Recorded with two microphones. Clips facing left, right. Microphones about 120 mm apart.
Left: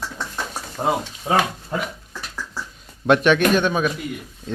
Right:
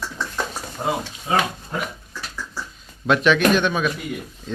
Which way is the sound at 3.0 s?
50° left (ahead or behind).